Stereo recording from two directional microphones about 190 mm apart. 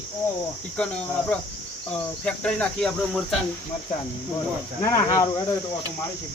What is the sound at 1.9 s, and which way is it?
Speech, 5° left (ahead or behind).